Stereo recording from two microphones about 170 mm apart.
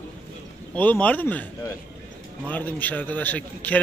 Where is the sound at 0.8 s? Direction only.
10° left (ahead or behind).